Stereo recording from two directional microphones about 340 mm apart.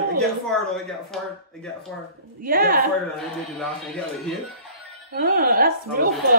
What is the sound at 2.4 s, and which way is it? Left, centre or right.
Speech, right.